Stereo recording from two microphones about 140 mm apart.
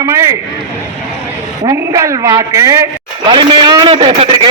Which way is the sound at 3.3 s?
35° right (ahead or behind).